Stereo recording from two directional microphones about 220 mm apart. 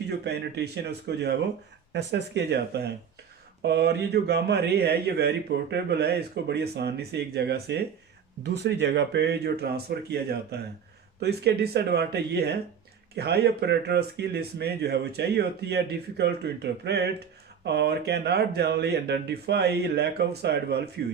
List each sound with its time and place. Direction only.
0.3 s speech: 50° right (ahead or behind)